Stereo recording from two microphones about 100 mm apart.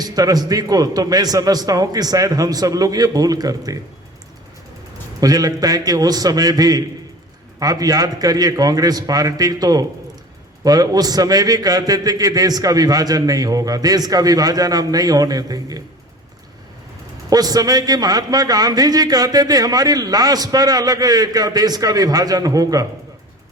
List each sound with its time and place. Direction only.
0.0 s a man's voice: 40° right (ahead or behind)
5.2 s a man's voice: 40° right (ahead or behind)
17.2 s a man's voice: 40° right (ahead or behind)